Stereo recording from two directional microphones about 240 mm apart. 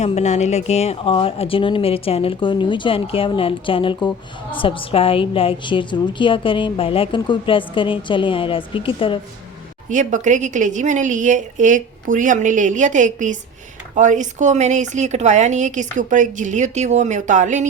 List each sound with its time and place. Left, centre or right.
0.0 s a woman's voice: left
9.9 s speech: right